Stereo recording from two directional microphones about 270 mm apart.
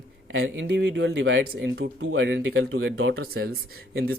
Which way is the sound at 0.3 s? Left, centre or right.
Right.